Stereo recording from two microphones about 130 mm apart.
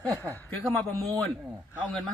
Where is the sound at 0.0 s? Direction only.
25° right (ahead or behind).